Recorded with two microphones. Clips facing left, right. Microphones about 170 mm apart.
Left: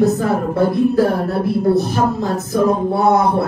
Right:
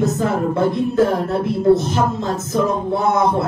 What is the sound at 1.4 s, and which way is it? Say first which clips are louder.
Music: right 1 dB; 20° right (ahead or behind).